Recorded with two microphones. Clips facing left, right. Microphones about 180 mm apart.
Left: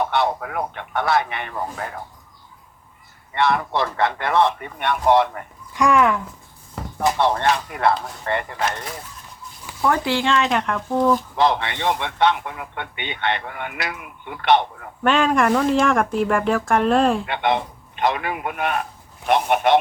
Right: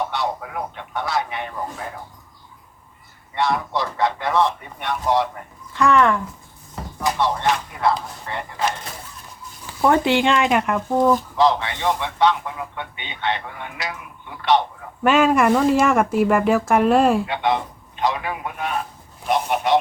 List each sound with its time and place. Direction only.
0.1 s speech: 60° left (ahead or behind)
3.3 s speech: 60° left (ahead or behind)
5.7 s speech: 10° left (ahead or behind)
7.2 s speech: 60° left (ahead or behind)
9.8 s speech: 20° right (ahead or behind)
11.3 s speech: 60° left (ahead or behind)
15.0 s speech: 5° right (ahead or behind)
17.2 s speech: 60° left (ahead or behind)